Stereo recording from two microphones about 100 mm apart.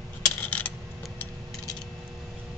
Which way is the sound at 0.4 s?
15° left (ahead or behind).